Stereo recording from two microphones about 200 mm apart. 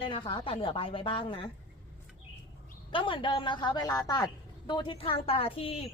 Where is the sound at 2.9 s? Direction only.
25° left (ahead or behind).